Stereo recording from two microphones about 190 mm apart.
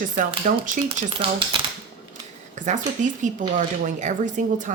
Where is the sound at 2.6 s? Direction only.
40° right (ahead or behind).